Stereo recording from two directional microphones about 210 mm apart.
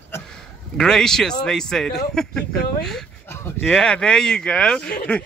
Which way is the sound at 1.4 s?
5° left (ahead or behind).